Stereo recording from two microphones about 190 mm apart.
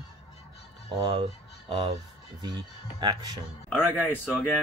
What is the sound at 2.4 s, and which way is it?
Speech, 20° right (ahead or behind).